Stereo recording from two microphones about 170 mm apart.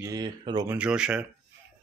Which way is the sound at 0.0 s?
20° right (ahead or behind).